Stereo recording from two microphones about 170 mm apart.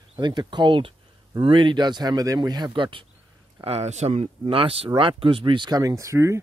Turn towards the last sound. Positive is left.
turn(degrees=-15)  # may be behind; listen again after turning